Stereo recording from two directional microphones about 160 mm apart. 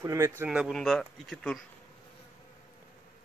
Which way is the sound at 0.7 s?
5° left (ahead or behind).